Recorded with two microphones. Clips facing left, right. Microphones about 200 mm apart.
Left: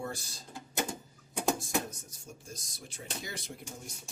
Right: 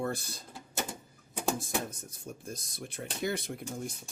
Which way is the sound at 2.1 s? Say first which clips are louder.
Right 6 dB; 55° right (ahead or behind).